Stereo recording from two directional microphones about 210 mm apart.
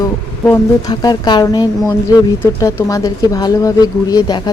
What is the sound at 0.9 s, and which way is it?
Speech, 20° left (ahead or behind).